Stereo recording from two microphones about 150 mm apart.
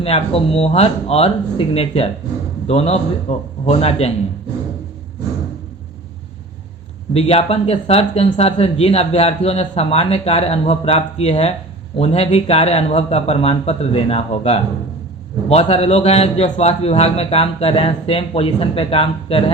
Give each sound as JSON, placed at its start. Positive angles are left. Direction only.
{"t": 0.0, "sound": "a man's voice", "side_deg": 40}
{"t": 7.1, "sound": "a man's voice", "side_deg": 40}